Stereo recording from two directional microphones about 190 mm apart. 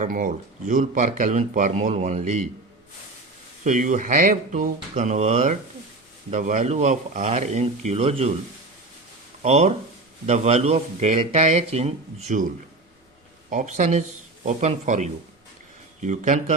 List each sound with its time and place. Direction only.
0.0 s speech: 45° right (ahead or behind)
3.6 s speech: 40° right (ahead or behind)
9.4 s speech: 35° right (ahead or behind)
13.5 s speech: 40° right (ahead or behind)